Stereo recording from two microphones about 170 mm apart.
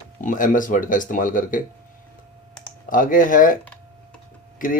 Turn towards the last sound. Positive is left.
turn(degrees=55)  # may be behind; listen again after turning